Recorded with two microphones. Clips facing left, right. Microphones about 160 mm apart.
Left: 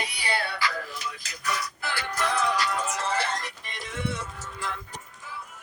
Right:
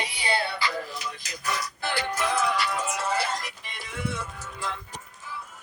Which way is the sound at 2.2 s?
5° right (ahead or behind).